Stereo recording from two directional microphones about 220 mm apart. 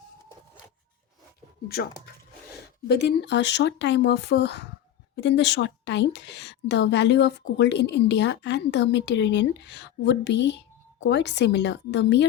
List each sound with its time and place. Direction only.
1.6 s a woman's voice: 45° left (ahead or behind)